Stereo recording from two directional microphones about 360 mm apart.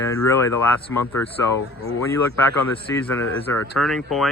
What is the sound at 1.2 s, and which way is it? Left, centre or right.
Speech, left.